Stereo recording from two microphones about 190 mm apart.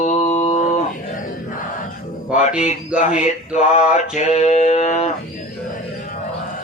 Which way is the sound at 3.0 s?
40° left (ahead or behind).